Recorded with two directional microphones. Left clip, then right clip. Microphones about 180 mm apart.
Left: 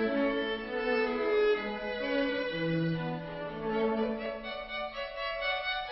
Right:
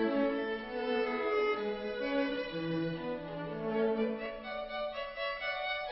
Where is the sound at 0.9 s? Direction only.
30° left (ahead or behind).